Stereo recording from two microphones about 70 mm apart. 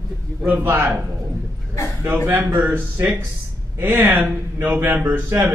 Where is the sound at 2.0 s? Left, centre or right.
Right.